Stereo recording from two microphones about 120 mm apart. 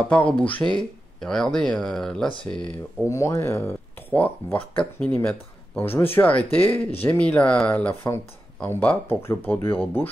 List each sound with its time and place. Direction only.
0.1 s speech: 10° left (ahead or behind)
3.1 s speech: 25° left (ahead or behind)